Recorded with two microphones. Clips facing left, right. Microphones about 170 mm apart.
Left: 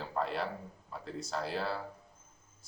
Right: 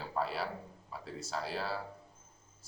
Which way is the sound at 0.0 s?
5° right (ahead or behind).